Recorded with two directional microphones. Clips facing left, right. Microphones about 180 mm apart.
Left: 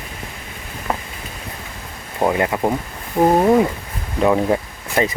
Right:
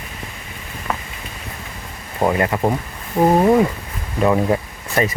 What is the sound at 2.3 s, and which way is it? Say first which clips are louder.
Speech: even; 10° left (ahead or behind).